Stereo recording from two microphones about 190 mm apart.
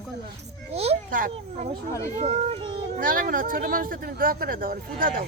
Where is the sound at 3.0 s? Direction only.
45° right (ahead or behind).